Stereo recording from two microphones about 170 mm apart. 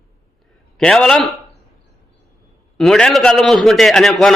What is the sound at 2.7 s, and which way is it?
A man's voice, centre (ahead or behind).